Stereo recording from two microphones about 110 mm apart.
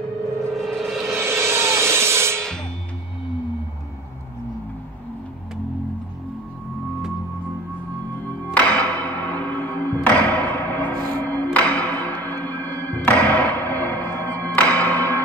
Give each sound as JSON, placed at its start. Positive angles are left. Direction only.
{"t": 0.6, "sound": "music", "side_deg": 0}
{"t": 1.1, "sound": "rub", "side_deg": -25}
{"t": 2.3, "sound": "music", "side_deg": 5}
{"t": 8.5, "sound": "music", "side_deg": 10}